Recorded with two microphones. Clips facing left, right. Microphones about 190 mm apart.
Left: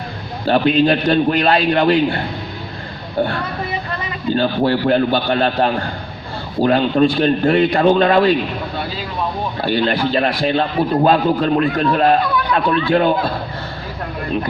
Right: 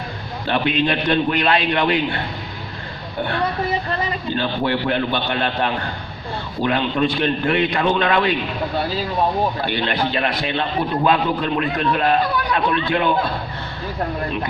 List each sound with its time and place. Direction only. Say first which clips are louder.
0.4 s a man's voice: left 6 dB; 40° left (ahead or behind)
3.2 s a man's voice: left 7 dB; 40° left (ahead or behind)
4.4 s a man's voice: left 6 dB; 35° left (ahead or behind)
9.6 s a man's voice: left 5 dB; 35° left (ahead or behind)